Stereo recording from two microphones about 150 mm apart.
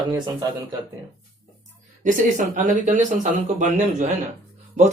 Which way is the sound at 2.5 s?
60° right (ahead or behind).